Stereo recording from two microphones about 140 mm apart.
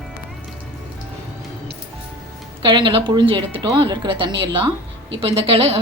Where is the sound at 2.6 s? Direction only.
35° right (ahead or behind).